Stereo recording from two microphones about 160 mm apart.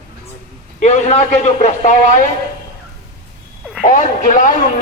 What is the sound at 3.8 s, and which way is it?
Speech, 50° left (ahead or behind).